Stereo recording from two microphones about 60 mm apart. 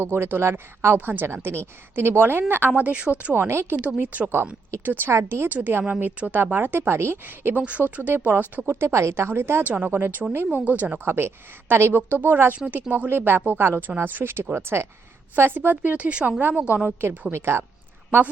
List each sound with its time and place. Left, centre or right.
0.0 s a woman's voice: right
3.3 s a woman's voice: right
3.8 s a woman's voice: right
5.5 s a woman's voice: right
7.5 s a woman's voice: right
8.8 s a woman's voice: right
9.6 s a woman's voice: right
11.0 s a woman's voice: right
12.0 s a woman's voice: right
17.3 s a woman's voice: right